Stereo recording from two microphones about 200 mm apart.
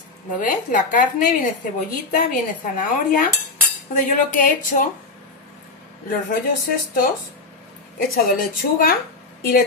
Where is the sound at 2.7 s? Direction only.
40° left (ahead or behind).